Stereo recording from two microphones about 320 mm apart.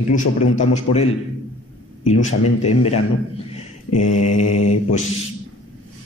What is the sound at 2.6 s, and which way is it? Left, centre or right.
Speech, centre.